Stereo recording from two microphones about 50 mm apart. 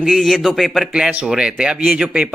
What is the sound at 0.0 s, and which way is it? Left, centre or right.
Speech, centre.